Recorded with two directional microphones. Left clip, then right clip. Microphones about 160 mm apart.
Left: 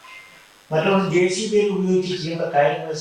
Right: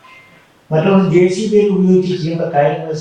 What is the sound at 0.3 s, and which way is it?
A man's voice, 15° right (ahead or behind).